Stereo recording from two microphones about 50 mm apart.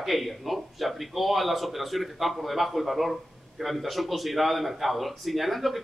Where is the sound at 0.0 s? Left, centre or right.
Centre.